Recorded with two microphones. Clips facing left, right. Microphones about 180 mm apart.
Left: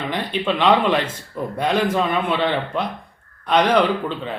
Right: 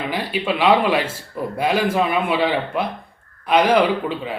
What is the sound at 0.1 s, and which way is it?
A man's voice, 10° right (ahead or behind).